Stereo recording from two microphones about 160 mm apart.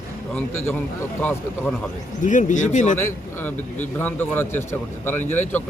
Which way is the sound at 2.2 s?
50° left (ahead or behind).